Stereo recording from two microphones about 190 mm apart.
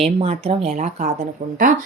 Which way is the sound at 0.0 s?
30° right (ahead or behind).